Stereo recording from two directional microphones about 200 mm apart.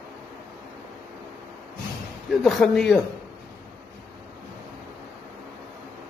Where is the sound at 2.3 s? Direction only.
Centre (ahead or behind).